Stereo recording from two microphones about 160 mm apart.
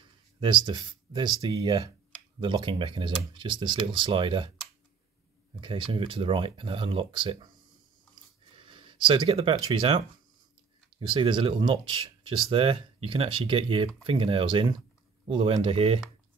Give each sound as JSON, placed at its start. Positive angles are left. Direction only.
{"t": 0.4, "sound": "speech", "side_deg": -30}
{"t": 5.6, "sound": "speech", "side_deg": -30}
{"t": 8.1, "sound": "a sound", "side_deg": -30}
{"t": 11.0, "sound": "speech", "side_deg": -30}